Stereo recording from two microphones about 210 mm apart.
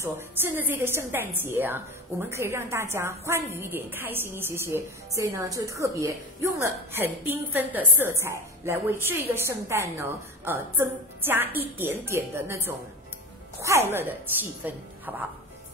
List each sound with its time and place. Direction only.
0.0 s a woman's voice: 10° right (ahead or behind)